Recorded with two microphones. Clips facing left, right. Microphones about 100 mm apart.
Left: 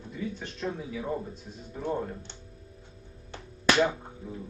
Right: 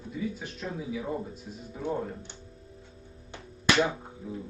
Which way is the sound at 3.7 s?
Centre (ahead or behind).